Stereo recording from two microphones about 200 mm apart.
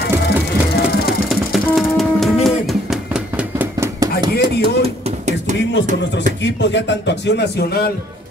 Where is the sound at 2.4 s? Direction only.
Centre (ahead or behind).